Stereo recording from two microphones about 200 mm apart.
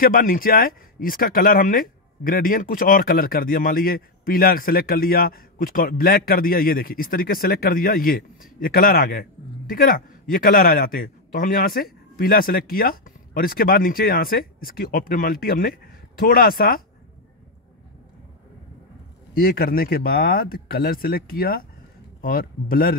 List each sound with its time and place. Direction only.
0.0 s speech: 45° left (ahead or behind)
19.3 s speech: 45° left (ahead or behind)